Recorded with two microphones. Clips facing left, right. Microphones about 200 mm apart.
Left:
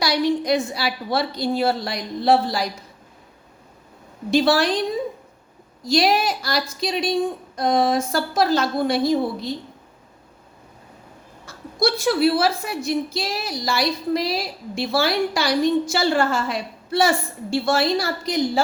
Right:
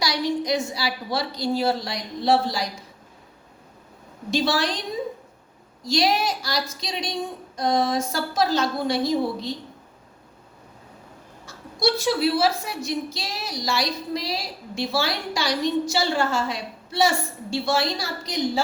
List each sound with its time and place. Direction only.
0.0 s a woman's voice: 55° left (ahead or behind)
4.3 s a woman's voice: 60° left (ahead or behind)
5.9 s a woman's voice: 60° left (ahead or behind)
11.4 s a woman's voice: 55° left (ahead or behind)